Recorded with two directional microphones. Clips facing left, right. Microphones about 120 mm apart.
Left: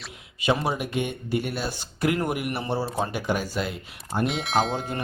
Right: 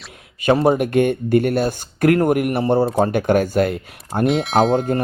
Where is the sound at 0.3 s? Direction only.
45° right (ahead or behind).